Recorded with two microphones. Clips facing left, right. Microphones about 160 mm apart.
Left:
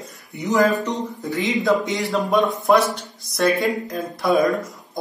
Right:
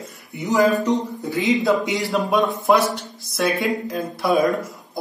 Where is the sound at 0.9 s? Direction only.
20° right (ahead or behind).